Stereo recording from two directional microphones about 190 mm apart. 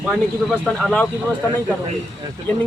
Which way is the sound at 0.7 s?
5° left (ahead or behind).